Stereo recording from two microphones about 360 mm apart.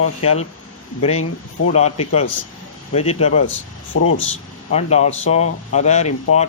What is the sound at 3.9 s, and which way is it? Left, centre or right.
Speech, left.